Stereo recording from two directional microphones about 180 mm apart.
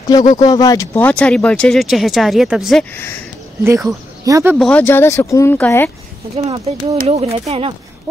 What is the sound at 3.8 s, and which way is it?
Speech, 20° right (ahead or behind).